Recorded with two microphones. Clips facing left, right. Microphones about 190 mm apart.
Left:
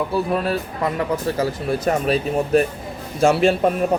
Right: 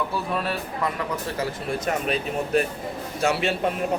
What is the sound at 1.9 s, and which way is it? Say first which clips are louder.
Speech: left 6 dB; 35° left (ahead or behind).